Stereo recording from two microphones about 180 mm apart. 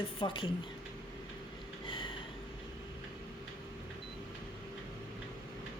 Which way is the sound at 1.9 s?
25° left (ahead or behind).